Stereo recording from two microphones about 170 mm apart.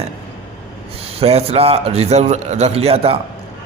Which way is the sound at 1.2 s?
35° right (ahead or behind).